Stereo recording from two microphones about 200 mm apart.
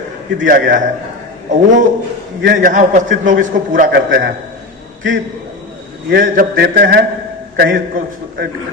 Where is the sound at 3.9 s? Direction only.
60° right (ahead or behind).